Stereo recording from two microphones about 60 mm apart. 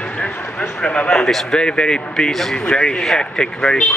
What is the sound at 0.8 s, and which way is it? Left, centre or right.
Speech, centre.